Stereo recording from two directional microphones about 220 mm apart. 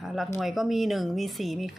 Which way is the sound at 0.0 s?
Centre (ahead or behind).